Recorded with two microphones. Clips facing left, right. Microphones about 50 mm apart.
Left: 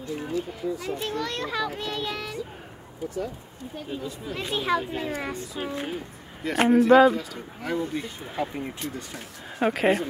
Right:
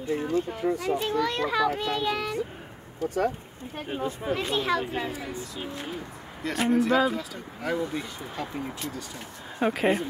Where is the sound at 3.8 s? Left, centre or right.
Right.